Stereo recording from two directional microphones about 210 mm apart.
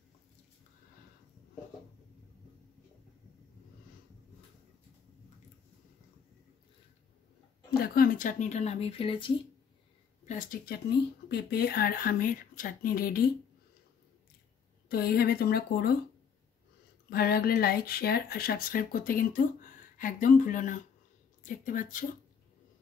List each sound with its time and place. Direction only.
7.7 s speech: 45° left (ahead or behind); by 9.3 s 25° left (ahead or behind)
10.2 s speech: 40° left (ahead or behind)
14.9 s speech: 45° left (ahead or behind)
17.1 s speech: 45° left (ahead or behind)